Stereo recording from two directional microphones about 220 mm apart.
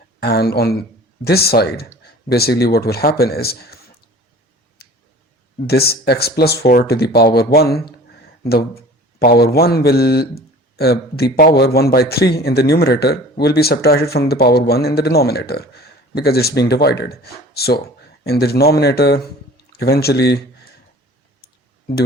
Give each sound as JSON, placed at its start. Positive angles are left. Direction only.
{"t": 0.2, "sound": "speech", "side_deg": 45}
{"t": 4.8, "sound": "tick", "side_deg": 45}
{"t": 5.6, "sound": "speech", "side_deg": 45}